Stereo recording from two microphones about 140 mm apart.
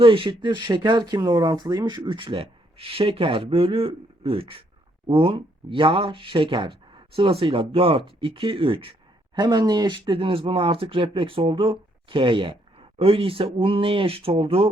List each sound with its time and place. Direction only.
0.0 s speech: 40° right (ahead or behind)